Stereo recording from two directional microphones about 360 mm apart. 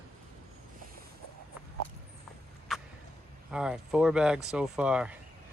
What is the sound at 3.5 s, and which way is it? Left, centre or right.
Speech, centre.